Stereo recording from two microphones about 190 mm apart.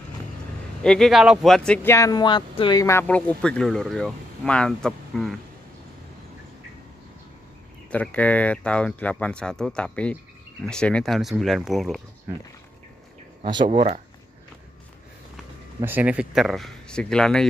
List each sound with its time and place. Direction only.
0.8 s speech: centre (ahead or behind)
2.0 s speech: 20° left (ahead or behind); by 5.3 s 5° left (ahead or behind)
7.9 s speech: 5° left (ahead or behind)
13.4 s speech: 25° right (ahead or behind)
13.7 s speech: 35° right (ahead or behind)
15.8 s speech: 10° right (ahead or behind)